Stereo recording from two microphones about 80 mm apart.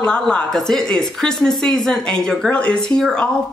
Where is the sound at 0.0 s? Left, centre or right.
Centre.